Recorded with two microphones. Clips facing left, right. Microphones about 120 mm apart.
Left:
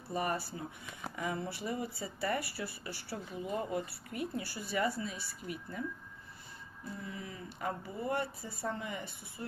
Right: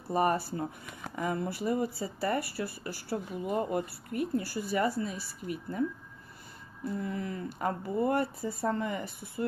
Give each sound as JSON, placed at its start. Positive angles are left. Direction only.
{"t": 0.1, "sound": "speech", "side_deg": -45}
{"t": 7.0, "sound": "speech", "side_deg": -50}